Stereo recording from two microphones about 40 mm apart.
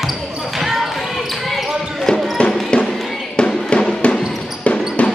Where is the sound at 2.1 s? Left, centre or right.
Left.